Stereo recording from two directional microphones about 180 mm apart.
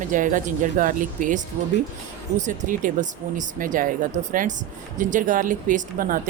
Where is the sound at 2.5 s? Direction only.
45° right (ahead or behind).